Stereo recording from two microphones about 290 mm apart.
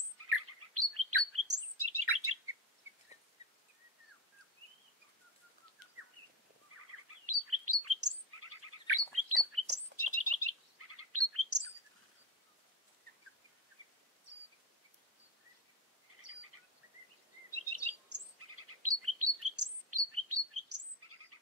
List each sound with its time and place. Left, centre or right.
0.4 s chirp: right
3.4 s a sound: left
6.7 s bird vocalization: right
7.2 s chirp: right
13.8 s a sound: right
17.5 s bird vocalization: right